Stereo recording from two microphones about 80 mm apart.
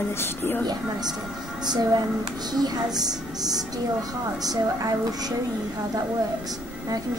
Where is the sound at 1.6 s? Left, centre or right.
Right.